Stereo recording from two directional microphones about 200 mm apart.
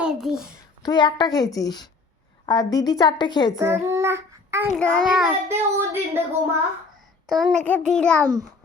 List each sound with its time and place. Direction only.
0.0 s a child's voice: 5° right (ahead or behind)
0.8 s a woman's voice: 20° left (ahead or behind)
3.7 s child singing: 15° right (ahead or behind)
4.8 s a child's voice: 5° left (ahead or behind); by 6.2 s 10° right (ahead or behind)
7.3 s a child's voice: centre (ahead or behind)